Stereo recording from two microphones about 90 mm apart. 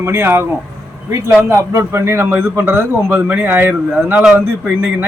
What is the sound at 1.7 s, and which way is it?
Speech, 35° right (ahead or behind).